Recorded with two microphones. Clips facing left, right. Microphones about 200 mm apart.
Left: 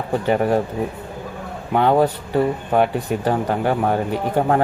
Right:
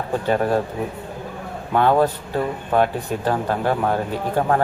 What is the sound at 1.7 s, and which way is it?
Speech, 15° left (ahead or behind).